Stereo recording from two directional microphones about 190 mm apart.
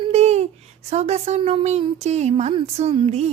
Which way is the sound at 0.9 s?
35° right (ahead or behind).